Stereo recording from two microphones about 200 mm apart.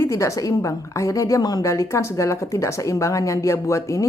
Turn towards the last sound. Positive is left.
turn(degrees=15)  # may be behind; listen again after turning